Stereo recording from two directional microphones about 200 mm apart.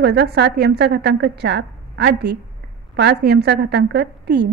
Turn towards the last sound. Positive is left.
turn(degrees=-60)  # may be behind; listen again after turning